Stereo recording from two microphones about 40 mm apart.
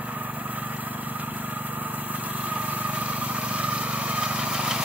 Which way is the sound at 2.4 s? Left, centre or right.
Right.